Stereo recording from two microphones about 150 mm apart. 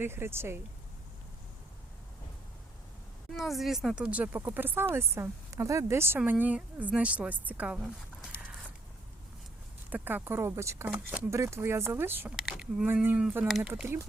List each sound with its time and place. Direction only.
0.0 s speech: 15° right (ahead or behind)
3.3 s speech: centre (ahead or behind)
9.9 s speech: 10° right (ahead or behind)
12.4 s speech: 5° right (ahead or behind)